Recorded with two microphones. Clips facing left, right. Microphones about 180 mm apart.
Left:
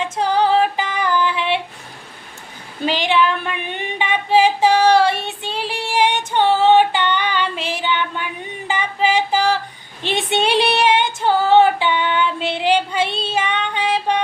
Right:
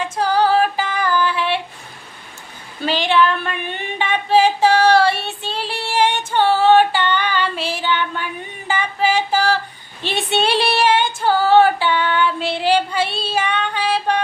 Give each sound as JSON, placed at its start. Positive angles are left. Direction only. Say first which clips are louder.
{"t": 0.0, "sound": "female singing", "louder": "even", "side_deg": 20}
{"t": 2.8, "sound": "a sound", "louder": "right 1 dB", "side_deg": 15}
{"t": 10.0, "sound": "female singing", "louder": "even", "side_deg": 15}